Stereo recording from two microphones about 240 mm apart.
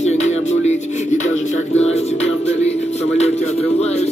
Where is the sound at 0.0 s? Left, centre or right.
Left.